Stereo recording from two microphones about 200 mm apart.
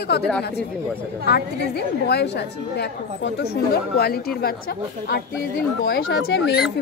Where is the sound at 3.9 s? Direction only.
50° left (ahead or behind).